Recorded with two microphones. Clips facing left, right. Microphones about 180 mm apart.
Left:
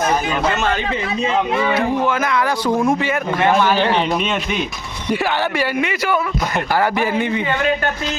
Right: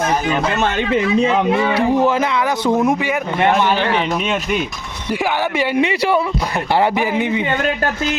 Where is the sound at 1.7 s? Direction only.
35° right (ahead or behind).